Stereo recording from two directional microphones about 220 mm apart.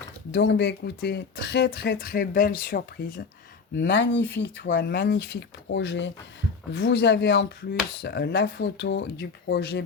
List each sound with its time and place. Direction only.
0.3 s speech: 55° left (ahead or behind)
3.8 s speech: 50° left (ahead or behind)